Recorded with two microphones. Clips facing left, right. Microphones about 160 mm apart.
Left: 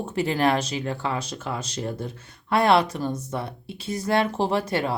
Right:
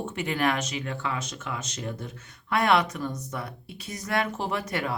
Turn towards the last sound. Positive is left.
turn(degrees=30)  # may be behind; listen again after turning